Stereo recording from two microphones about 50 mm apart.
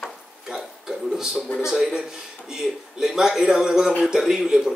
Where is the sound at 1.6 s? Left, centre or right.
Centre.